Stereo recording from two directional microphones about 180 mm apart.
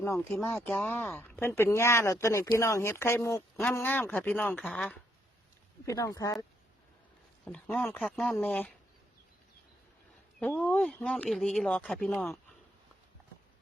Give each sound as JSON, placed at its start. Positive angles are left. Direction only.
{"t": 0.0, "sound": "speech", "side_deg": 15}
{"t": 5.8, "sound": "speech", "side_deg": 15}
{"t": 7.4, "sound": "speech", "side_deg": 5}
{"t": 10.4, "sound": "speech", "side_deg": 5}